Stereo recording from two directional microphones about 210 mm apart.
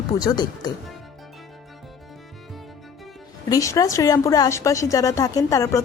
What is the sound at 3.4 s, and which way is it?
Speech, 15° left (ahead or behind).